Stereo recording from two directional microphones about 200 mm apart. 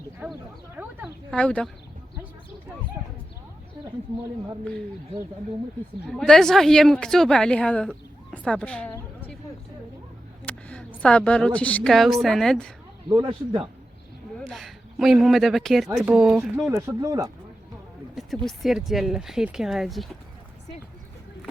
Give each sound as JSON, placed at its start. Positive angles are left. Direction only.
{"t": 0.2, "sound": "speech", "side_deg": -10}
{"t": 0.8, "sound": "a sound", "side_deg": -10}
{"t": 1.3, "sound": "a woman's voice", "side_deg": 5}
{"t": 6.1, "sound": "a woman's voice", "side_deg": 0}
{"t": 10.4, "sound": "a woman's voice", "side_deg": 5}
{"t": 13.1, "sound": "a man's voice", "side_deg": -20}
{"t": 14.3, "sound": "a woman's voice", "side_deg": 0}
{"t": 18.1, "sound": "a sound", "side_deg": 0}
{"t": 18.4, "sound": "a woman's voice", "side_deg": 0}